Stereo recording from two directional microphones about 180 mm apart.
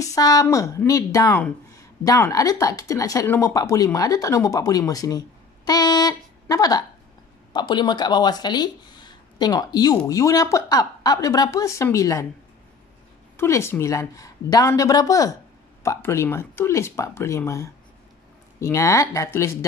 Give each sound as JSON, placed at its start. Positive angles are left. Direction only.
{"t": 0.0, "sound": "speech", "side_deg": 20}
{"t": 13.4, "sound": "speech", "side_deg": 15}